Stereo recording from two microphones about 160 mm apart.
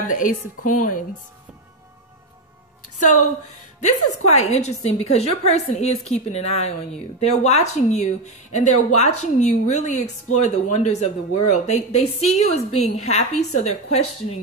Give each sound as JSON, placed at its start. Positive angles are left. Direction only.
{"t": 0.1, "sound": "a woman's voice", "side_deg": 55}
{"t": 3.8, "sound": "a woman's voice", "side_deg": 45}